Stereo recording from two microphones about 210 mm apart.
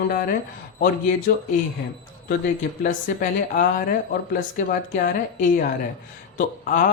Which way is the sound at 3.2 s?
40° left (ahead or behind).